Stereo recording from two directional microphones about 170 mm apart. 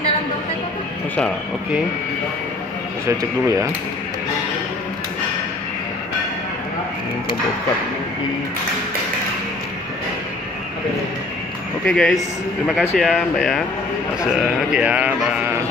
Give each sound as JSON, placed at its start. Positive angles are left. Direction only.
{"t": 3.1, "sound": "speech", "side_deg": -20}
{"t": 11.8, "sound": "sheep", "side_deg": 5}